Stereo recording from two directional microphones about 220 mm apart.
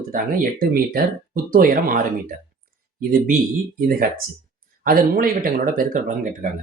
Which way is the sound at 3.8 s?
40° right (ahead or behind).